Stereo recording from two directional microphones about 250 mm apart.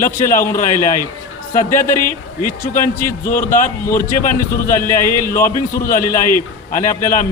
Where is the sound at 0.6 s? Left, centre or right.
Left.